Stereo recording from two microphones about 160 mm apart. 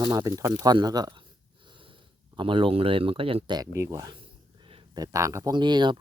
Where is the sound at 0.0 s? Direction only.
25° right (ahead or behind).